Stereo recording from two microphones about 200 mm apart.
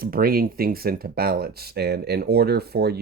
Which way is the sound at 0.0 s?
45° right (ahead or behind).